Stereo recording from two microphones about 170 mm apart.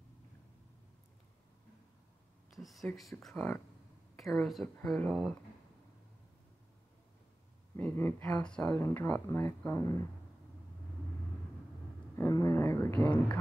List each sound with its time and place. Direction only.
2.5 s speech: centre (ahead or behind)
7.7 s speech: 10° left (ahead or behind)
12.2 s speech: 20° left (ahead or behind)